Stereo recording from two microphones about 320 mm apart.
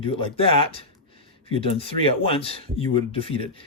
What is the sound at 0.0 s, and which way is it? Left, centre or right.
Speech, centre.